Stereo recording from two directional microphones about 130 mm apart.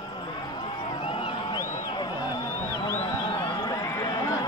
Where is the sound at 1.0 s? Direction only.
45° left (ahead or behind).